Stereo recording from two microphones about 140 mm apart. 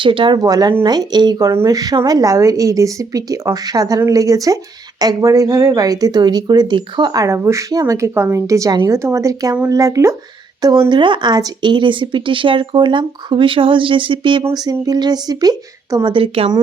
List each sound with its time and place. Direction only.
0.0 s a woman's voice: 35° right (ahead or behind)
16.1 s speech: 40° right (ahead or behind)